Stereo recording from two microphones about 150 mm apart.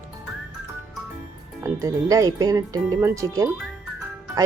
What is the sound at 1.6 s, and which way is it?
Speech, 20° right (ahead or behind).